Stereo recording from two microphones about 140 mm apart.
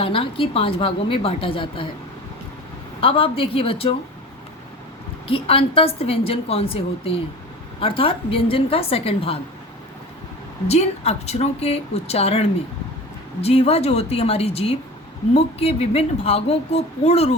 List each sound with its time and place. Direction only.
0.0 s a woman's voice: 40° left (ahead or behind)
3.0 s a woman's voice: 40° left (ahead or behind)
5.3 s a woman's voice: 40° left (ahead or behind)
10.7 s a woman's voice: 50° left (ahead or behind)